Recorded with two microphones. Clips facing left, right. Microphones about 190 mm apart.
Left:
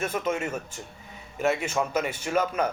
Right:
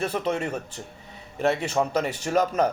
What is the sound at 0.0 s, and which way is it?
A man's voice, 35° right (ahead or behind).